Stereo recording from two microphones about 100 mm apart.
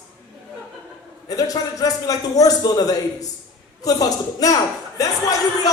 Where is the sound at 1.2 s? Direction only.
35° left (ahead or behind).